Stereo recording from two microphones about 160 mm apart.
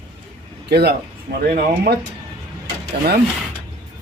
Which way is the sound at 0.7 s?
90° right.